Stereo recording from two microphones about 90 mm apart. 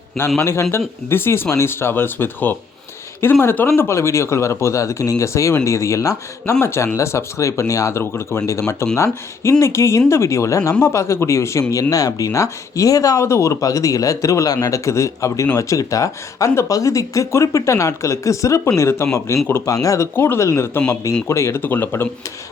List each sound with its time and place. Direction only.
0.3 s speech: 30° left (ahead or behind)
20.1 s speech: 25° left (ahead or behind)